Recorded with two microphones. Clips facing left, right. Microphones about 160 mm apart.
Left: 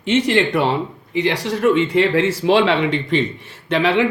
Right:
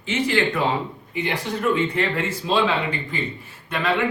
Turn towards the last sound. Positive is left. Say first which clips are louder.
# left 6 dB
turn(degrees=90)